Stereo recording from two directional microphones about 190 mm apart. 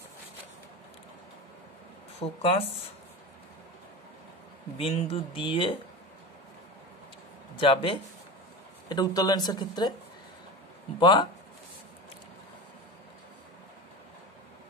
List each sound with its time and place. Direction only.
2.1 s speech: 30° left (ahead or behind)
4.7 s speech: 30° left (ahead or behind)
7.5 s speech: 25° left (ahead or behind)
11.0 s speech: 25° left (ahead or behind)